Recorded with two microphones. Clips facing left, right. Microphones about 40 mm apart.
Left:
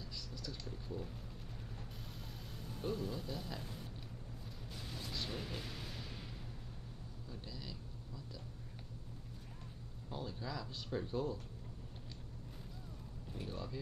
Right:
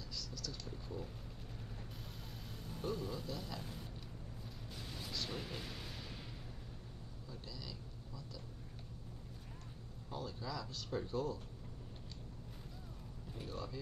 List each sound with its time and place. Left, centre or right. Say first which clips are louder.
0.1 s a sound: right 3 dB; left
0.7 s a sound: left 3 dB; centre
2.8 s a man's voice: left 1 dB; centre
5.3 s speech: even; centre
7.2 s cat: left 1 dB; centre
10.0 s speech: even; centre
13.4 s a man's voice: even; centre